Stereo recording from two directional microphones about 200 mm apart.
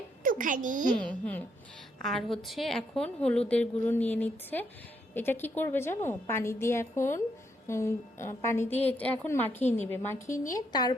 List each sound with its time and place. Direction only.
0.2 s a child's voice: 45° right (ahead or behind)
0.9 s a woman's voice: 5° left (ahead or behind)